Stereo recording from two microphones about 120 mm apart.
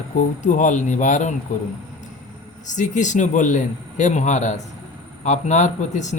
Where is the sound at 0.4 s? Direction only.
90° left.